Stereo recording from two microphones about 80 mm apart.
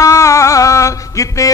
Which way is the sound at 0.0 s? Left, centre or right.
Left.